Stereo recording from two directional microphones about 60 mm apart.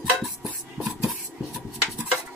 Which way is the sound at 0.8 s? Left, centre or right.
Right.